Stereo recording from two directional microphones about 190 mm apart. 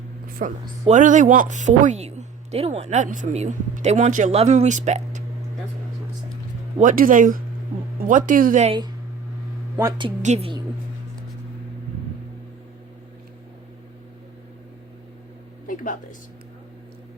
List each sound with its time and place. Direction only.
0.4 s speech: 45° right (ahead or behind)
6.7 s speech: 45° right (ahead or behind)
10.2 s speech: 30° right (ahead or behind)
15.6 s a sound: 45° left (ahead or behind)